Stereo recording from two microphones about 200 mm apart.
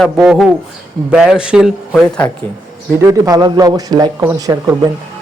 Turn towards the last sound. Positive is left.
turn(degrees=-15)  # may be behind; listen again after turning